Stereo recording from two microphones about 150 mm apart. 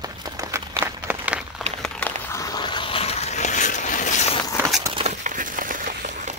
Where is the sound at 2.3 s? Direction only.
25° left (ahead or behind); by 4.1 s 55° left (ahead or behind).